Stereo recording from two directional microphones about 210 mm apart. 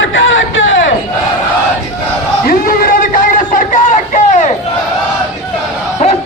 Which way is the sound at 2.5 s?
45° left (ahead or behind).